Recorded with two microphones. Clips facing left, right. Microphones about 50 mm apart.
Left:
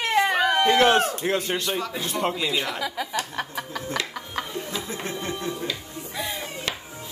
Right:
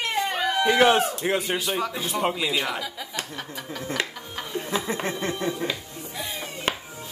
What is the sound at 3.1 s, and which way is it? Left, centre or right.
Chuckle, left.